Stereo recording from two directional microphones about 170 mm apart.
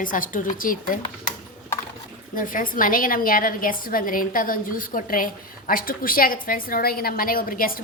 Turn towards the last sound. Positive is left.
turn(degrees=55)  # may be behind; listen again after turning